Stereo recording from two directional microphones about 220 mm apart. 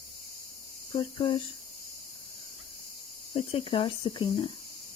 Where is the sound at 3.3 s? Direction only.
25° left (ahead or behind).